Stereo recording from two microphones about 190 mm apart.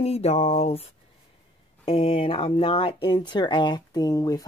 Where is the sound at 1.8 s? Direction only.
30° left (ahead or behind).